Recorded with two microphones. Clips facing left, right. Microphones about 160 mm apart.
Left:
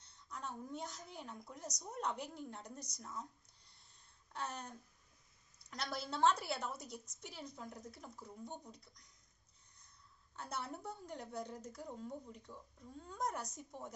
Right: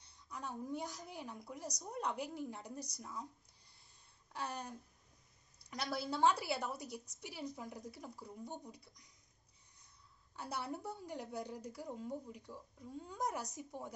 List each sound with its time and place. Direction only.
0.3 s a woman's voice: 10° right (ahead or behind)
4.3 s a woman's voice: 10° right (ahead or behind)
10.3 s a woman's voice: 5° right (ahead or behind)